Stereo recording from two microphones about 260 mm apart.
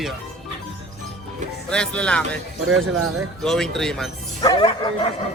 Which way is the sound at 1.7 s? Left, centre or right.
Centre.